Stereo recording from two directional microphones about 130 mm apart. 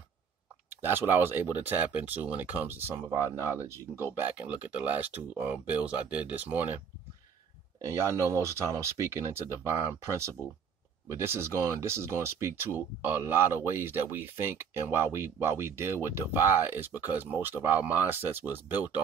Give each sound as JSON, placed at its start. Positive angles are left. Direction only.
{"t": 0.7, "sound": "speech", "side_deg": -15}
{"t": 7.8, "sound": "speech", "side_deg": -20}